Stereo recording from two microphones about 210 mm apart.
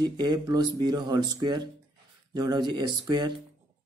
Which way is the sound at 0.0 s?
20° right (ahead or behind).